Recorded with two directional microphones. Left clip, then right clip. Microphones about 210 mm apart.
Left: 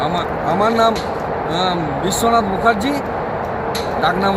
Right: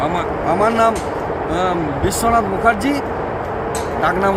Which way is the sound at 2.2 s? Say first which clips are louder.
Even; centre (ahead or behind).